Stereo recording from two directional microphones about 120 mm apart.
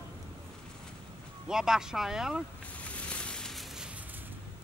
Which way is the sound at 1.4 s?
5° right (ahead or behind).